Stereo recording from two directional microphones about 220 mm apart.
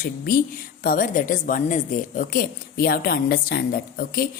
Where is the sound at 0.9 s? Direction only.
40° left (ahead or behind).